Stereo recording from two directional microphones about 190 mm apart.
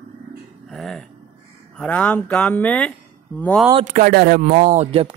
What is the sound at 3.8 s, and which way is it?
Speech, 45° right (ahead or behind).